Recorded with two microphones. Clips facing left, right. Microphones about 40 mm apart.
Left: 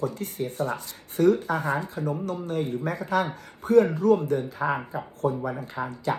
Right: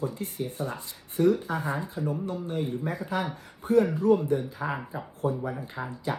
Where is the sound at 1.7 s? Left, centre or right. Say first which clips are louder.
Left 2 dB; left.